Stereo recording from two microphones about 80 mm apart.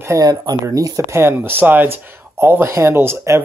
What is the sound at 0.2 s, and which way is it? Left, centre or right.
Speech, right.